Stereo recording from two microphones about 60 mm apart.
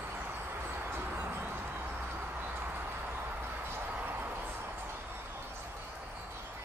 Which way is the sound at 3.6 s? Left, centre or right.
Right.